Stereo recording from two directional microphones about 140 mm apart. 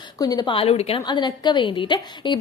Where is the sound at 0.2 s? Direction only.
30° left (ahead or behind).